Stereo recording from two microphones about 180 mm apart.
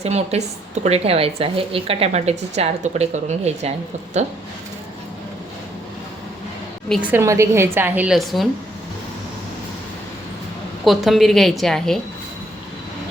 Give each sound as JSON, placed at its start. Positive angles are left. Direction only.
{"t": 0.0, "sound": "a woman's voice", "side_deg": -35}
{"t": 7.0, "sound": "a woman's voice", "side_deg": -15}
{"t": 10.8, "sound": "a woman's voice", "side_deg": 0}